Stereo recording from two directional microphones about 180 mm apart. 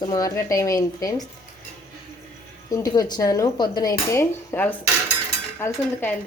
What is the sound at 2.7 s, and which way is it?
Speech, 20° left (ahead or behind).